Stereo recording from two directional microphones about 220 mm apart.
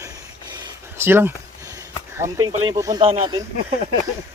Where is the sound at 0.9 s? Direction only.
10° right (ahead or behind); by 3.3 s 25° right (ahead or behind).